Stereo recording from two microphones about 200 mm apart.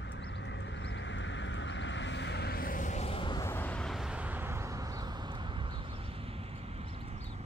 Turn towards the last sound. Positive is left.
turn(degrees=-25)  # may be behind; listen again after turning